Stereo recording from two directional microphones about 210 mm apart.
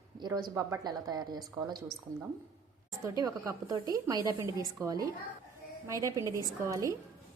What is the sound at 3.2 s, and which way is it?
A woman's voice, 15° right (ahead or behind).